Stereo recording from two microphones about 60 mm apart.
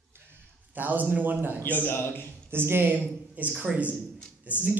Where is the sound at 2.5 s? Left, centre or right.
Right.